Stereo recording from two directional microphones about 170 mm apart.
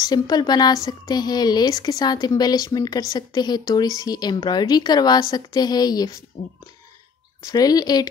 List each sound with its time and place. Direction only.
0.0 s a woman's voice: 25° left (ahead or behind)
7.5 s a woman's voice: 20° left (ahead or behind)